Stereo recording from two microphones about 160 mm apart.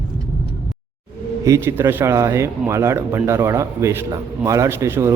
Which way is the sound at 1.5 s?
15° right (ahead or behind).